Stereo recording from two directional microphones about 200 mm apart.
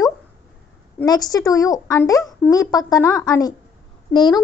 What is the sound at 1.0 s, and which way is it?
A woman's voice, 20° left (ahead or behind).